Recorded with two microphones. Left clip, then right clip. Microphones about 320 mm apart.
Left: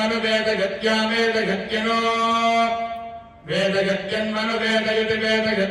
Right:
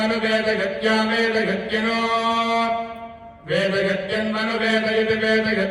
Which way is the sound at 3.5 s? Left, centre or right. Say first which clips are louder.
Even; left.